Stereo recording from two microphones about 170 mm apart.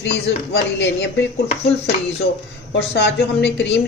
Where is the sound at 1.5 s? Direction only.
35° left (ahead or behind).